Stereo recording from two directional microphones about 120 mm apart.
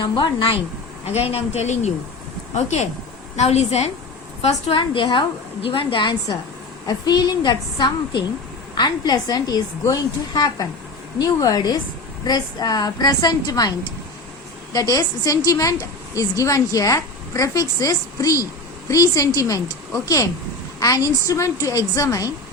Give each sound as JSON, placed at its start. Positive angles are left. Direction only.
{"t": 0.0, "sound": "a woman's voice", "side_deg": 40}
{"t": 1.0, "sound": "speech", "side_deg": 60}
{"t": 1.6, "sound": "speech", "side_deg": 75}
{"t": 4.4, "sound": "a woman's voice", "side_deg": 45}
{"t": 20.7, "sound": "a woman's voice", "side_deg": 30}